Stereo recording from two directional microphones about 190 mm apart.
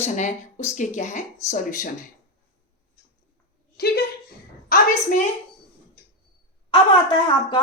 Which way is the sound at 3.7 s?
55° left (ahead or behind).